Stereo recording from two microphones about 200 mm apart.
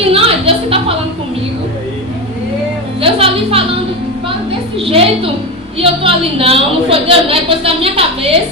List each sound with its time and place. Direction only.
0.1 s music: 30° right (ahead or behind)
3.0 s music: 30° right (ahead or behind)
4.9 s a woman's voice: 30° right (ahead or behind)